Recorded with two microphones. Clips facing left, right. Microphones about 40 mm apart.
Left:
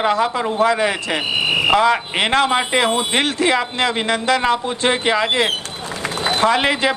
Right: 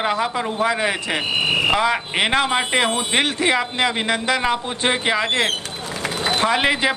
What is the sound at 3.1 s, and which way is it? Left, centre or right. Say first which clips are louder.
Speech: right 1 dB; centre.